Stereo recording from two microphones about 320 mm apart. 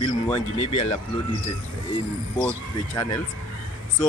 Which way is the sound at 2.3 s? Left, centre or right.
Centre.